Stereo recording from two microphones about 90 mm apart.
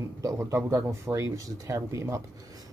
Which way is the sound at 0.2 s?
35° right (ahead or behind).